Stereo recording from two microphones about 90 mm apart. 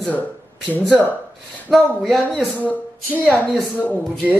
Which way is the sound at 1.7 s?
Centre (ahead or behind).